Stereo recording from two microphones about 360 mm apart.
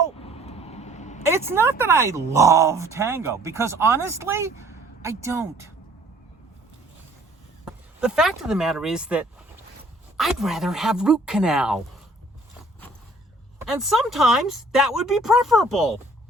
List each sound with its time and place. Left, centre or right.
0.3 s vehicle: centre
1.2 s speech: centre
7.6 s speech: centre
13.6 s speech: centre